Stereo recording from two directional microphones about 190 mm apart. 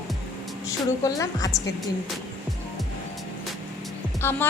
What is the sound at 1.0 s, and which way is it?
Speech, 20° left (ahead or behind).